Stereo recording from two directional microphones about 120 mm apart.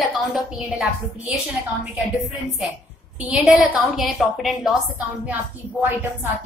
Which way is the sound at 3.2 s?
5° right (ahead or behind).